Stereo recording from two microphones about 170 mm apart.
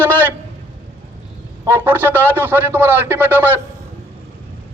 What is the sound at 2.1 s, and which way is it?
A man's voice, 10° right (ahead or behind).